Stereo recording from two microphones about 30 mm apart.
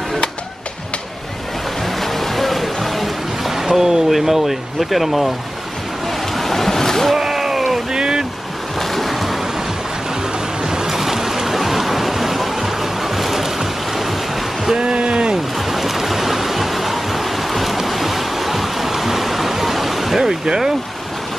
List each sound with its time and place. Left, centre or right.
1.9 s music: centre
3.5 s speech: centre
6.0 s waves: centre
7.2 s a sound: centre
7.9 s boat: right
8.7 s waves: centre
10.6 s boat: right
10.9 s stream: centre
14.8 s a sound: right
15.5 s waves: centre
20.2 s speech: centre